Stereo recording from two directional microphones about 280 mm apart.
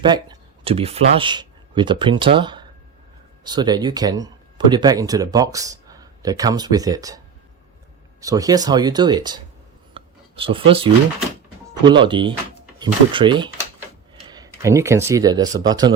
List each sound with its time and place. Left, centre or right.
0.0 s speech: centre
8.2 s speech: centre
9.9 s a sound: centre
11.9 s speech: centre